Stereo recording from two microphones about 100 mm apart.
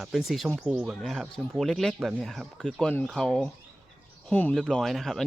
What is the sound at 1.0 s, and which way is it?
Speech, 5° left (ahead or behind).